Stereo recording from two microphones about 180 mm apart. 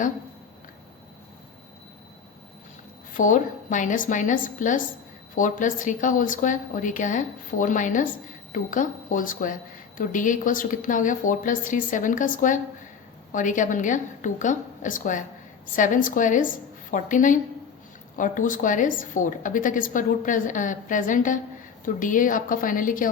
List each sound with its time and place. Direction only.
3.2 s a woman's voice: 45° left (ahead or behind)